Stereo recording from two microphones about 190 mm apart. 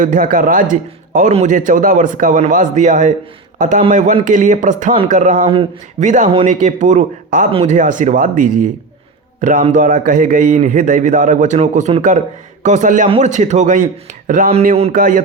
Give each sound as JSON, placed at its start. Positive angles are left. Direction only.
{"t": 0.0, "sound": "a man's voice", "side_deg": -45}
{"t": 5.5, "sound": "speech", "side_deg": -30}
{"t": 6.4, "sound": "a man's voice", "side_deg": -40}